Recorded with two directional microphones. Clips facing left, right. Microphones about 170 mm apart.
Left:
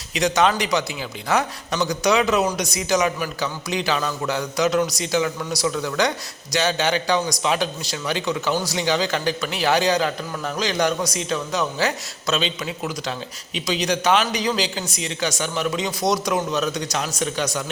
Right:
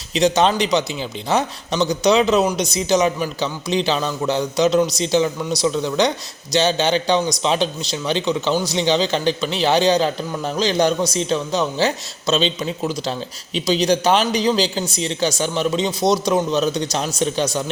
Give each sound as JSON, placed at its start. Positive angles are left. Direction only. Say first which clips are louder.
{"t": 0.1, "sound": "speech", "louder": "right 3 dB", "side_deg": -25}